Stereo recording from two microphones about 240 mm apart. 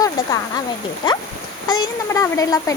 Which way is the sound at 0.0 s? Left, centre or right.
Centre.